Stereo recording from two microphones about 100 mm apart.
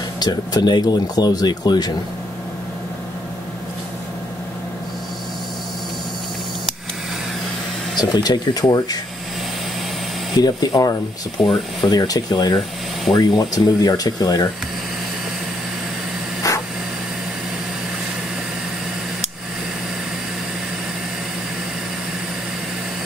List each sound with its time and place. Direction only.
0.2 s speech: 45° left (ahead or behind)
8.0 s speech: 45° left (ahead or behind)
10.4 s speech: 40° left (ahead or behind)
12.5 s speech: 5° left (ahead or behind)
13.2 s speech: 40° left (ahead or behind)
16.5 s a sound: 35° left (ahead or behind)